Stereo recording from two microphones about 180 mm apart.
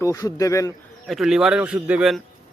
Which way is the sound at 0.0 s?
20° left (ahead or behind).